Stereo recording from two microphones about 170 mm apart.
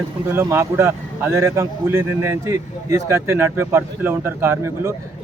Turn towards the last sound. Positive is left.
turn(degrees=-15)  # may be behind; listen again after turning